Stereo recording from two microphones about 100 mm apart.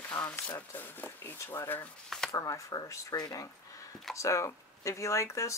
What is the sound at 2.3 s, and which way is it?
Speech, 35° left (ahead or behind).